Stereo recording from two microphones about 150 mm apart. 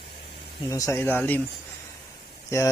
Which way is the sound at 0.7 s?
20° left (ahead or behind).